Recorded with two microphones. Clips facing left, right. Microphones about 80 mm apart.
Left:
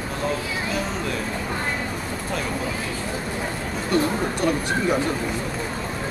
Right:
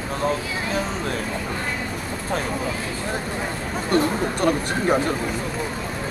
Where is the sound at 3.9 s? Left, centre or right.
Right.